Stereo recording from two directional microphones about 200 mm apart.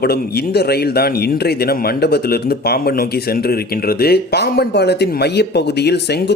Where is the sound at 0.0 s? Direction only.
50° left (ahead or behind).